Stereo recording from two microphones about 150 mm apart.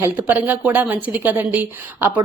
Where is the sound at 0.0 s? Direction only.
10° right (ahead or behind).